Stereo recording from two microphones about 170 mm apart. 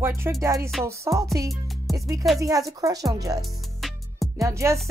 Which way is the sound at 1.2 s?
20° right (ahead or behind).